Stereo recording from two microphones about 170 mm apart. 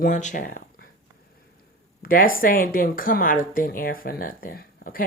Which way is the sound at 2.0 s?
55° left (ahead or behind).